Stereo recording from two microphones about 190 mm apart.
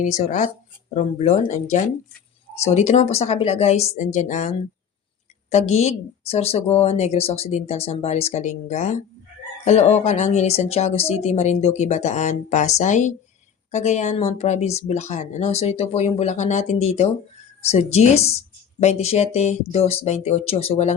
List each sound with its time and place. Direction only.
0.0 s speech: 40° left (ahead or behind)